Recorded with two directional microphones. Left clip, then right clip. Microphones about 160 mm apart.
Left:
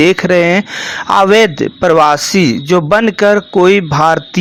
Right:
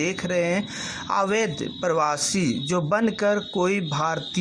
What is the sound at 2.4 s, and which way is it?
Speech, 65° left (ahead or behind).